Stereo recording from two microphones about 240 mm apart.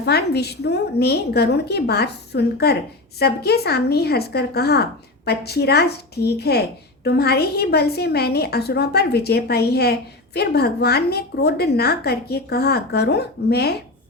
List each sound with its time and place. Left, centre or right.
0.0 s a woman's voice: left